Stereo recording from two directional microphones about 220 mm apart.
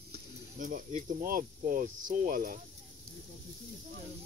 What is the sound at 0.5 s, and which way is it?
Speech, 35° right (ahead or behind).